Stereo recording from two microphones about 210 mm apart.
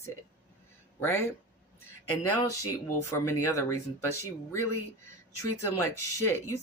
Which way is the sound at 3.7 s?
90° left.